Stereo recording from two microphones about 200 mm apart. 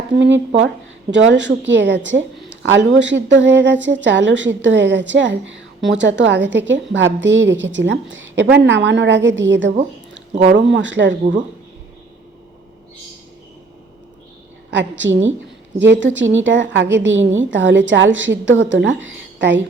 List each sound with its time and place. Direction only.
0.2 s a woman's voice: 65° right (ahead or behind)
14.7 s a woman's voice: 65° right (ahead or behind)